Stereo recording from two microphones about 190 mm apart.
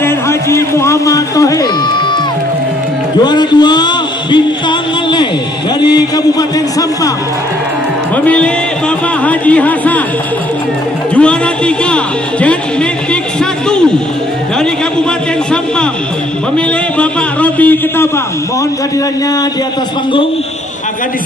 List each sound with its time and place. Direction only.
0.0 s music: 15° left (ahead or behind)
3.3 s music: 20° left (ahead or behind)
5.9 s speech: 20° left (ahead or behind)
9.2 s a man's voice: 5° left (ahead or behind)
11.1 s speech: 5° left (ahead or behind)
16.5 s a man's voice: 5° left (ahead or behind)